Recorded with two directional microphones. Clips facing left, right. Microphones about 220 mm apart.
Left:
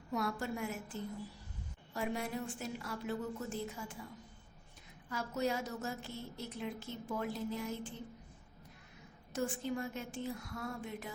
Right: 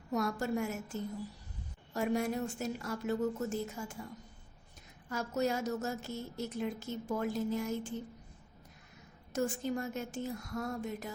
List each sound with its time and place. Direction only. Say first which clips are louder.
0.1 s a woman's voice: right 4 dB; 45° right (ahead or behind)
5.0 s a woman's voice: right 3 dB; 45° right (ahead or behind)
9.3 s a woman's voice: right 3 dB; 45° right (ahead or behind)